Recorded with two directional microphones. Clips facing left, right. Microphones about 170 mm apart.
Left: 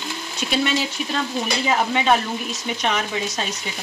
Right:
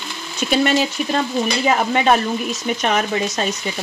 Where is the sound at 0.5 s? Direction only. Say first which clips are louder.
Right 5 dB; 50° right (ahead or behind).